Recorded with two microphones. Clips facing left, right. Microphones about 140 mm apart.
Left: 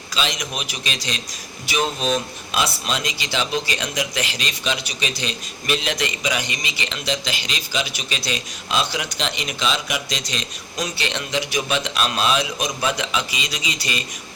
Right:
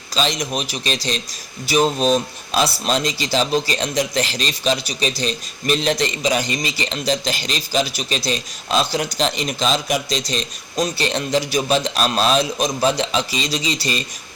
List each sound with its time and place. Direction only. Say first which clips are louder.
0.1 s speech: right 5 dB; 35° right (ahead or behind)